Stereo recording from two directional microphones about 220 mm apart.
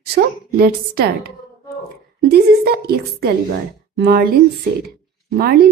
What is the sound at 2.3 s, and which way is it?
A woman's voice, 45° right (ahead or behind).